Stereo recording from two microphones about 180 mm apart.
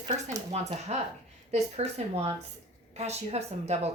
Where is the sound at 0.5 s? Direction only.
40° right (ahead or behind).